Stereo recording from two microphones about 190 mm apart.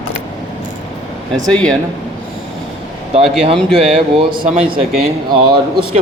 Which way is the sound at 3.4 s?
30° right (ahead or behind).